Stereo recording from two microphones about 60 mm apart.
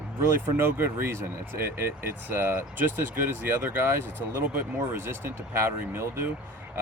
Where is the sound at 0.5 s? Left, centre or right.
Right.